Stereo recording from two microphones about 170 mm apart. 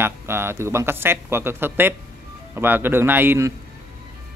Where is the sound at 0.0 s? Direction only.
15° right (ahead or behind).